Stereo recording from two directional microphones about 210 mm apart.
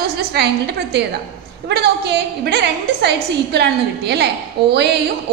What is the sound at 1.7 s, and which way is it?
A woman's voice, 50° right (ahead or behind).